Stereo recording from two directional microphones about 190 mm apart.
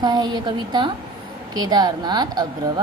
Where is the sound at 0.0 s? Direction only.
20° right (ahead or behind).